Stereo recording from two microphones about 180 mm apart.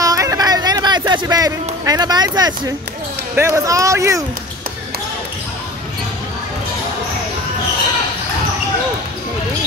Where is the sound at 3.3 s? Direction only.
15° right (ahead or behind).